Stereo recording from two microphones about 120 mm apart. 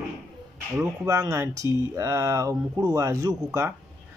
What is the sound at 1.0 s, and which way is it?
Speech, 25° right (ahead or behind).